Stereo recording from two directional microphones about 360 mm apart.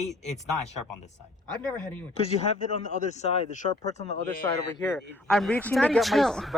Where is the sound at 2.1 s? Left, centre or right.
Centre.